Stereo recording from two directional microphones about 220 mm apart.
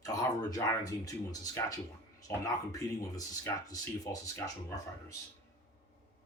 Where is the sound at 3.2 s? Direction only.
15° left (ahead or behind).